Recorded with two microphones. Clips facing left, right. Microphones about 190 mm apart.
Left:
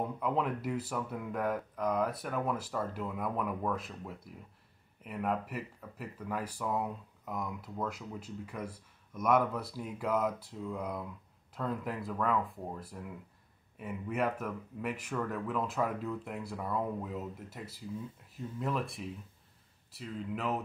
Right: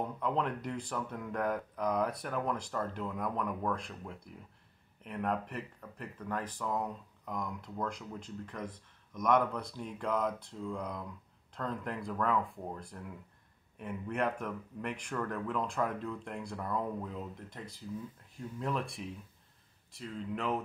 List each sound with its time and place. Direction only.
0.2 s speech: 5° left (ahead or behind)